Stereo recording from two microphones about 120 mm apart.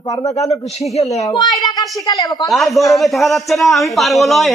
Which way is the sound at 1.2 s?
30° left (ahead or behind).